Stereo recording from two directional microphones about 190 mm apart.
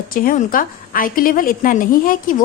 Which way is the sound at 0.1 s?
45° left (ahead or behind).